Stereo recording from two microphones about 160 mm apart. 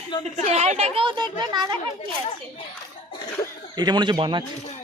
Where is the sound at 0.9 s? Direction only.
30° right (ahead or behind).